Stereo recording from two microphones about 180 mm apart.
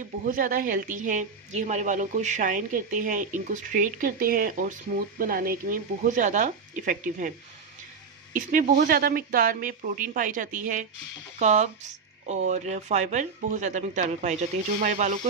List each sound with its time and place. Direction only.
0.3 s a woman's voice: 50° right (ahead or behind)